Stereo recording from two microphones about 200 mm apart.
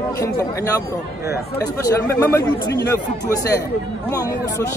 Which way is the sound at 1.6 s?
15° left (ahead or behind).